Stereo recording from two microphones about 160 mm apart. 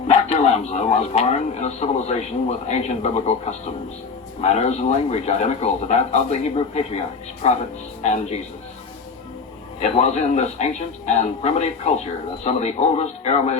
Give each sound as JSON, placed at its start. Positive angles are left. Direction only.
{"t": 0.1, "sound": "speech", "side_deg": 45}
{"t": 8.0, "sound": "speech", "side_deg": 45}
{"t": 9.8, "sound": "speech", "side_deg": 40}